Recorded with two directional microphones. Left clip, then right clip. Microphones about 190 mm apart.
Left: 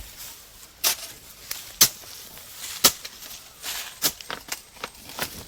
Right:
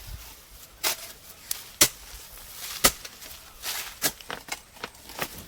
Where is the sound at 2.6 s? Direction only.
35° right (ahead or behind).